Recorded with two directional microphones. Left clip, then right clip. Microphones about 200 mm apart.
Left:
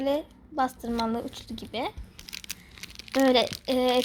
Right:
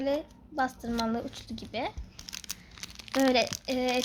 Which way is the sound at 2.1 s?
20° right (ahead or behind).